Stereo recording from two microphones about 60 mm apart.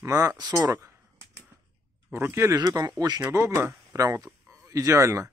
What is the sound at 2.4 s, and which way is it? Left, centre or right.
Speech, right.